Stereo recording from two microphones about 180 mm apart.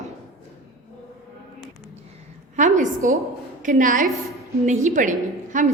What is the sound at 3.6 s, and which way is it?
A woman's voice, 45° right (ahead or behind).